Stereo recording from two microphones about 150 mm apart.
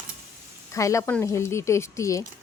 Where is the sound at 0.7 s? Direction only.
20° left (ahead or behind).